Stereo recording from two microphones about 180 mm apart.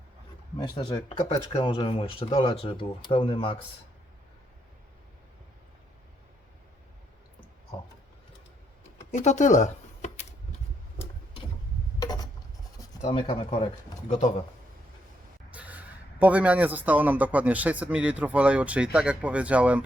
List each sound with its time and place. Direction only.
0.6 s speech: 30° left (ahead or behind)
9.1 s speech: 40° left (ahead or behind)
11.9 s a sound: 20° left (ahead or behind)
13.4 s speech: 30° left (ahead or behind)
14.1 s speech: 40° left (ahead or behind)
15.4 s a man's voice: 10° right (ahead or behind)